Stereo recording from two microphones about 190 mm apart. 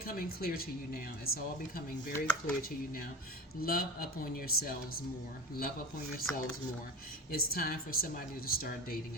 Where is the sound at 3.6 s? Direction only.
50° left (ahead or behind).